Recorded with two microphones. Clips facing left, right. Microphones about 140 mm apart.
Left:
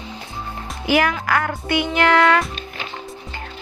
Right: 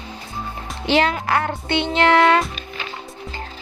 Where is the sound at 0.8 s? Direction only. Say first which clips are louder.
Even; 25° right (ahead or behind).